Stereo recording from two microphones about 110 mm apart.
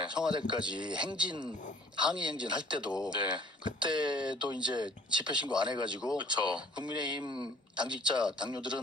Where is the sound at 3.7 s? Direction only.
45° right (ahead or behind).